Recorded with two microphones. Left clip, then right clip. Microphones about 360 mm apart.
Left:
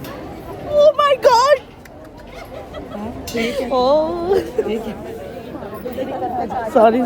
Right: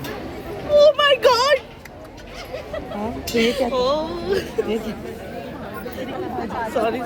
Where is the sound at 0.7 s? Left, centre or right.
Centre.